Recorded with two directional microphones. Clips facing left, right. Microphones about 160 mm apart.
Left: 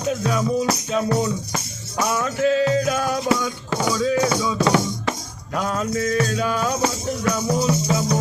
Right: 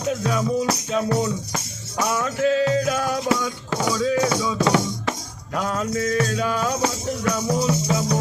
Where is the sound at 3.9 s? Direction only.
15° left (ahead or behind).